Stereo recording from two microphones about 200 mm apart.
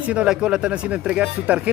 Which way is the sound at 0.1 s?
5° right (ahead or behind).